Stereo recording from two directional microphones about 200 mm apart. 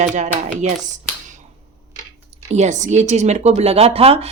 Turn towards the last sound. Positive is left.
turn(degrees=-30)  # may be behind; listen again after turning